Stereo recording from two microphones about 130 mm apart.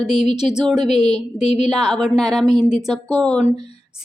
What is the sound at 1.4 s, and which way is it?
Speech, 60° left (ahead or behind).